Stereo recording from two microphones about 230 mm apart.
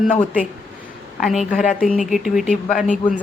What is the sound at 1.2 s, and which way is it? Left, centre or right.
Speech, centre.